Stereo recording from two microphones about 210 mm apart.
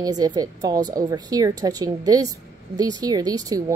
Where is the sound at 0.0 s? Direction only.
20° right (ahead or behind).